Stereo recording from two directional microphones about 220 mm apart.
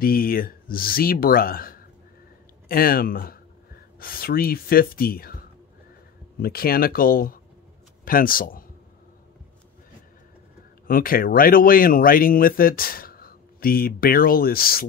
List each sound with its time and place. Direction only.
0.0 s speech: 40° left (ahead or behind)
6.4 s a man's voice: 45° left (ahead or behind)
10.9 s speech: 40° left (ahead or behind)